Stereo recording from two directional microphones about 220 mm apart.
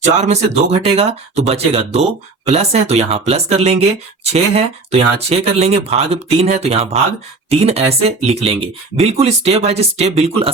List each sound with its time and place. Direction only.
0.0 s speech: 30° right (ahead or behind)